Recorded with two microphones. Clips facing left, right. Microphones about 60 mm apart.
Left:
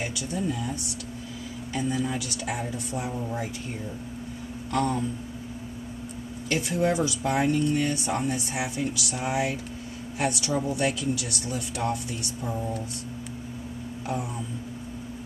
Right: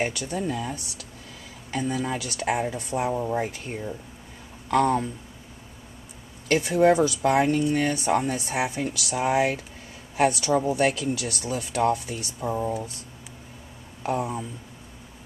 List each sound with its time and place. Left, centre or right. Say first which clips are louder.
0.0 s speech: right 3 dB; right
4.6 s speech: right 5 dB; right
6.5 s a woman's voice: right 6 dB; right
12.4 s speech: right 6 dB; right
14.0 s speech: right 5 dB; right